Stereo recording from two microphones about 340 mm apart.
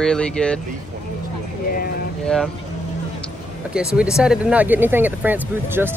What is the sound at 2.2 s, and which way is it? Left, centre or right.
Speech, centre.